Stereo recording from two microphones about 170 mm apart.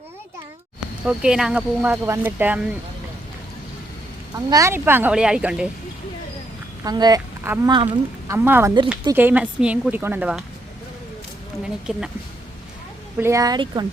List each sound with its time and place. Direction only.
1.0 s speech: 5° right (ahead or behind)
4.4 s speech: 20° right (ahead or behind)
6.8 s speech: 25° right (ahead or behind)
7.4 s a woman's voice: 10° right (ahead or behind)
11.9 s speech: 5° right (ahead or behind)
13.1 s speech: 15° right (ahead or behind)